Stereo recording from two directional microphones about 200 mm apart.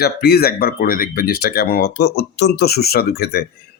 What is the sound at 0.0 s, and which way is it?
Speech, 50° left (ahead or behind).